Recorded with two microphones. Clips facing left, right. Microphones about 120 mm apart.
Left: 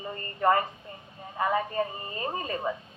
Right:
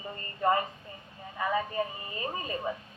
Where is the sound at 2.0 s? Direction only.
35° left (ahead or behind).